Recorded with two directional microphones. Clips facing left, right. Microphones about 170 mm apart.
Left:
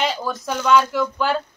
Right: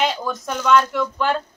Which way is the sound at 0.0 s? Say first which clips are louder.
Right 1 dB; centre (ahead or behind).